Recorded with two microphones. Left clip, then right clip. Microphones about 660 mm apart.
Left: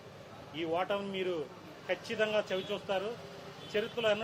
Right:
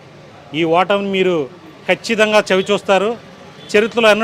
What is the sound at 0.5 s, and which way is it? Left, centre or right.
A man's voice, right.